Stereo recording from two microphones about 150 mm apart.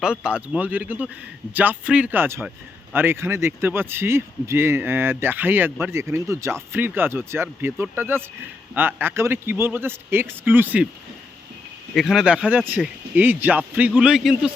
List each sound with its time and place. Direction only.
0.0 s speech: 5° right (ahead or behind)
11.9 s speech: centre (ahead or behind)